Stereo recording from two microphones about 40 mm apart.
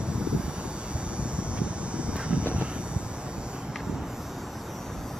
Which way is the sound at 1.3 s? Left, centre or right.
Right.